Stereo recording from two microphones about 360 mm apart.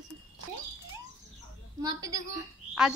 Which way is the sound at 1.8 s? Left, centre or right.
Centre.